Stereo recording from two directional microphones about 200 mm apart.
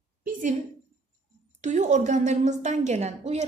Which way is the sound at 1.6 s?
35° right (ahead or behind).